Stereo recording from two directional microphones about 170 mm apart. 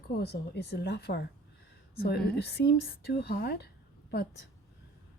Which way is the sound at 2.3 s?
75° left (ahead or behind).